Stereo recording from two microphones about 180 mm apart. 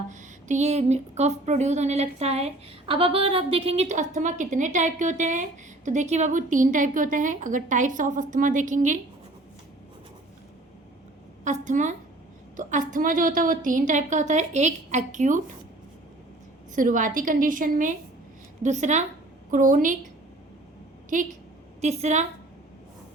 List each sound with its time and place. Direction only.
0.1 s speech: 45° right (ahead or behind)
11.4 s speech: 45° right (ahead or behind)
16.7 s a woman's voice: 45° right (ahead or behind)
21.8 s a woman's voice: 40° right (ahead or behind)